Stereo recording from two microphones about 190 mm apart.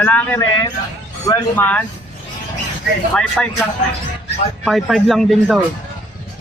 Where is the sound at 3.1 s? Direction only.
5° left (ahead or behind).